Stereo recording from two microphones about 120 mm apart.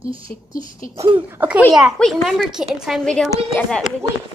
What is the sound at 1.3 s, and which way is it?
Speech, 15° right (ahead or behind).